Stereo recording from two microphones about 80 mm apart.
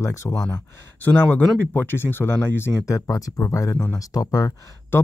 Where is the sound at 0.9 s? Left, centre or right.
Left.